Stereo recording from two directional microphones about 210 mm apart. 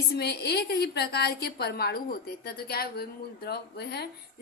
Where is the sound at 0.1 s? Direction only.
50° left (ahead or behind).